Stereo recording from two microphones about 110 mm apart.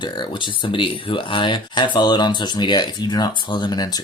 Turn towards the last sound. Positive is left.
turn(degrees=35)  # may be behind; listen again after turning